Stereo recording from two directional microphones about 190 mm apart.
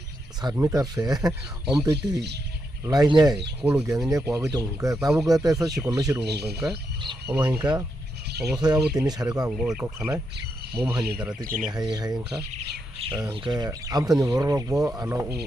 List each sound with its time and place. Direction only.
0.5 s speech: 15° right (ahead or behind)
2.0 s speech: 60° right (ahead or behind)
2.8 s speech: 20° right (ahead or behind)
3.6 s speech: 5° right (ahead or behind)
4.9 s speech: 5° right (ahead or behind)
5.4 s speech: 20° right (ahead or behind)
6.2 s speech: 60° right (ahead or behind)
7.3 s speech: 10° right (ahead or behind)
8.3 s bird: 60° right (ahead or behind)
8.5 s speech: 20° right (ahead or behind)
9.5 s speech: 5° right (ahead or behind)
11.7 s speech: 20° right (ahead or behind)